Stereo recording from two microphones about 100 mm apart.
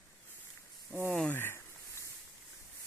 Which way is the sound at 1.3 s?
20° left (ahead or behind).